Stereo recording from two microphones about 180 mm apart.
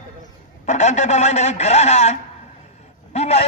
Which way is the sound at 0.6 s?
40° left (ahead or behind).